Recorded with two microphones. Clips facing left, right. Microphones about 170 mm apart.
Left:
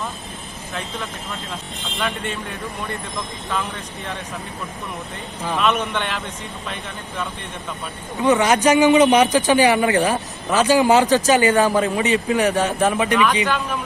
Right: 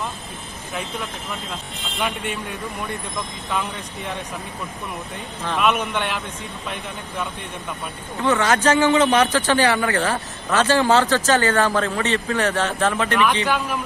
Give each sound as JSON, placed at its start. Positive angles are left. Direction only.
{"t": 2.0, "sound": "speech", "side_deg": -10}
{"t": 5.5, "sound": "speech", "side_deg": 0}
{"t": 8.2, "sound": "a man's voice", "side_deg": 15}